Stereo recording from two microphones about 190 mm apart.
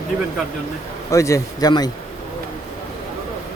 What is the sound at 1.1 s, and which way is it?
Speech, 15° left (ahead or behind).